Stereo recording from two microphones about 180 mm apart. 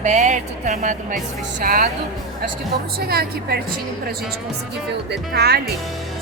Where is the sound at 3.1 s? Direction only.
60° right (ahead or behind).